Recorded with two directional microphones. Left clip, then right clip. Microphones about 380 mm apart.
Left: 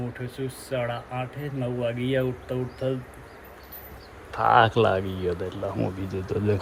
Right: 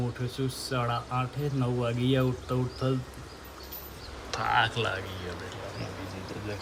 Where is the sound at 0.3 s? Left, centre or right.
Centre.